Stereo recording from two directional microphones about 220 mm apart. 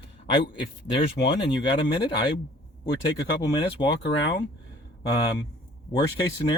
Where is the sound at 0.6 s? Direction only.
50° left (ahead or behind).